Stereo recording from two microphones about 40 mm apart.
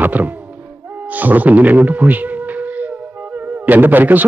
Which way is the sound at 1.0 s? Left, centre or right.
Right.